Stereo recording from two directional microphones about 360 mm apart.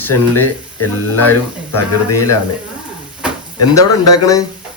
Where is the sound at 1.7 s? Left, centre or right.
Left.